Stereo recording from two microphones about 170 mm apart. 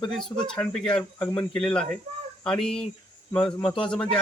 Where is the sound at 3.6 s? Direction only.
30° left (ahead or behind).